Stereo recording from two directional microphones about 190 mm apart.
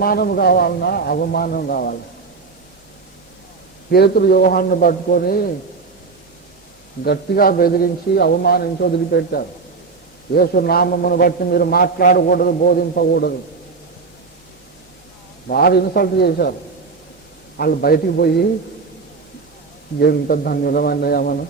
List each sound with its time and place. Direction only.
0.0 s a man's voice: 50° left (ahead or behind)
3.8 s a man's voice: 55° left (ahead or behind)
7.0 s a man's voice: 55° left (ahead or behind)
15.4 s a man's voice: 55° left (ahead or behind)
17.6 s a man's voice: 50° left (ahead or behind)
20.0 s a man's voice: 50° left (ahead or behind)